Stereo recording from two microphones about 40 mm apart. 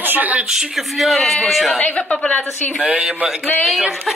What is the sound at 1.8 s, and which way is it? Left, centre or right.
Speech, left.